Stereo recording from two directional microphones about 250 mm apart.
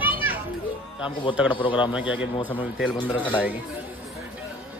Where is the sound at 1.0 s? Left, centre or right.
Centre.